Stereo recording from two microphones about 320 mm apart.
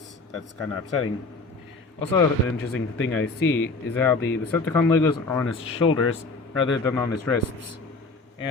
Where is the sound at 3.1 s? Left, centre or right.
Left.